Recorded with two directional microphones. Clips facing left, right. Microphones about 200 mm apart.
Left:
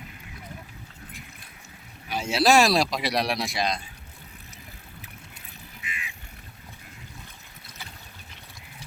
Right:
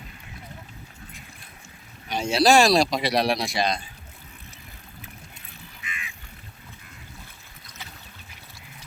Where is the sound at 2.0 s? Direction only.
5° left (ahead or behind).